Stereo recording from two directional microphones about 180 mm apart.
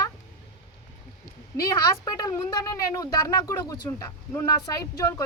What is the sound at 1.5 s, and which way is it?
A woman's voice, 20° left (ahead or behind).